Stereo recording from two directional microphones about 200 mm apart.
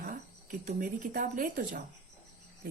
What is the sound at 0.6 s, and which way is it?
Speech, 45° right (ahead or behind).